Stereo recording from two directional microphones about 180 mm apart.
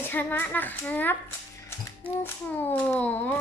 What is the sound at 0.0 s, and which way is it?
A child's voice, 10° left (ahead or behind).